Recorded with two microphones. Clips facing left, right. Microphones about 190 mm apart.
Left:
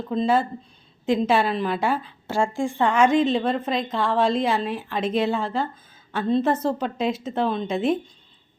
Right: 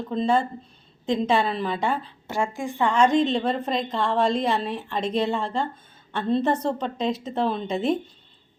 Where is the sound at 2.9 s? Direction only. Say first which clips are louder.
Even; 5° left (ahead or behind).